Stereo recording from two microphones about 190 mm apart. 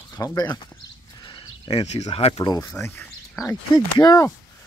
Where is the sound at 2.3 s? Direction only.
20° left (ahead or behind).